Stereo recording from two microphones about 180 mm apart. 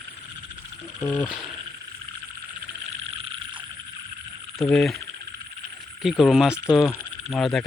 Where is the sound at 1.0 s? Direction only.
15° left (ahead or behind).